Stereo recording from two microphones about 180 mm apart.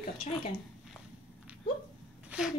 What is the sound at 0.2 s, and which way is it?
Speech, 35° left (ahead or behind).